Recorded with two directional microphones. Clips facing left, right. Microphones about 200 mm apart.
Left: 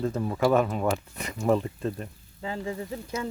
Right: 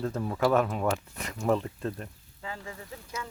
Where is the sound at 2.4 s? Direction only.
25° left (ahead or behind).